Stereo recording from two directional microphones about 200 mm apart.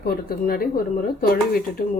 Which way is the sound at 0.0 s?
45° left (ahead or behind).